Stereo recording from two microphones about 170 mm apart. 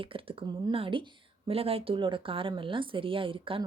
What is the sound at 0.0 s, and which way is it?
Speech, 30° right (ahead or behind).